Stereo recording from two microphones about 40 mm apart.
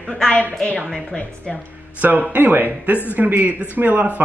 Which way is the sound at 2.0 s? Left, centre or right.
Right.